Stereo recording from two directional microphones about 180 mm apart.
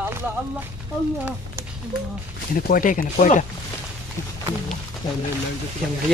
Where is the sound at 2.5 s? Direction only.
50° left (ahead or behind).